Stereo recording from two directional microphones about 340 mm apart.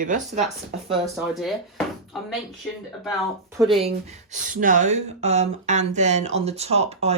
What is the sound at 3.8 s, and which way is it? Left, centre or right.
A woman's voice, centre.